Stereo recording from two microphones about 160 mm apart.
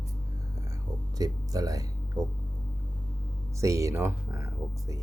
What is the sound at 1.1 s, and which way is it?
Speech, 20° right (ahead or behind).